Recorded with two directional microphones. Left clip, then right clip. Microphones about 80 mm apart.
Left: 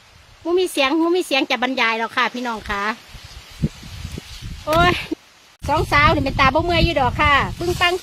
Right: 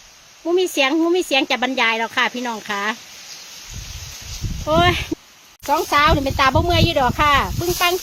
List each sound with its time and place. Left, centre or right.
0.4 s speech: centre
4.6 s speech: centre
5.9 s speech: centre
6.9 s speech: centre